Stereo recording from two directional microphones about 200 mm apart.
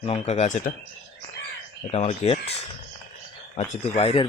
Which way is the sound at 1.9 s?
35° left (ahead or behind).